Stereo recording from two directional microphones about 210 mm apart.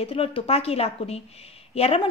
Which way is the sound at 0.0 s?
25° left (ahead or behind).